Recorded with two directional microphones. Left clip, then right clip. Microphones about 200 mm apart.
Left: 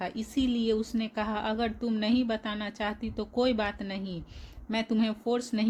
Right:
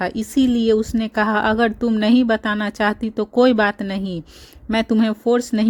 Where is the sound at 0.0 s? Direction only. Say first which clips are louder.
Right 12 dB; 45° right (ahead or behind).